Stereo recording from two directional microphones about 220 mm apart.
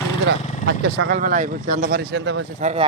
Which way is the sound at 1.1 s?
35° right (ahead or behind).